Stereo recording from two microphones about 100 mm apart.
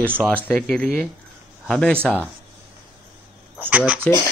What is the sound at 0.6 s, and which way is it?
Speech, centre (ahead or behind).